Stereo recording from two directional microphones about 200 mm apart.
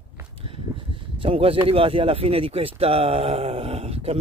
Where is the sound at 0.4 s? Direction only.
25° right (ahead or behind).